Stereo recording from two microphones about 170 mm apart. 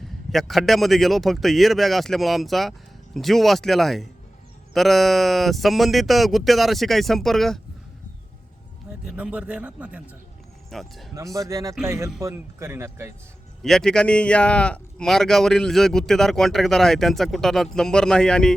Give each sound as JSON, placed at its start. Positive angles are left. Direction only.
{"t": 0.3, "sound": "a man's voice", "side_deg": 0}
{"t": 9.0, "sound": "a man's voice", "side_deg": -5}
{"t": 11.3, "sound": "speech", "side_deg": -20}
{"t": 13.6, "sound": "a man's voice", "side_deg": 5}